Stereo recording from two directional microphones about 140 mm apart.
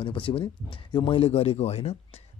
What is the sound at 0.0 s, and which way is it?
Speech, 40° left (ahead or behind).